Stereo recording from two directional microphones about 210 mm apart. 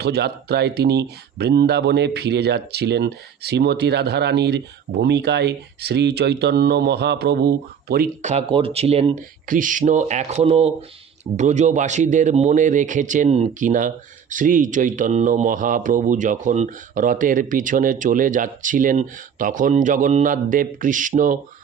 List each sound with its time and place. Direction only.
0.0 s speech: 50° right (ahead or behind)
8.3 s speech: 25° right (ahead or behind)